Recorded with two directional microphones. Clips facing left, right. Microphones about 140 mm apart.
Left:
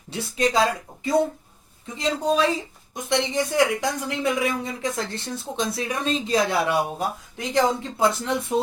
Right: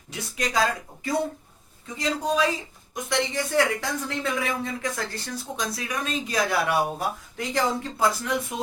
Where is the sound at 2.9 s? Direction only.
20° left (ahead or behind).